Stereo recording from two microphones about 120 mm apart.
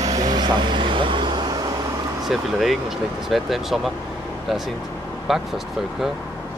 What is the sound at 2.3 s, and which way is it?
Speech, centre (ahead or behind).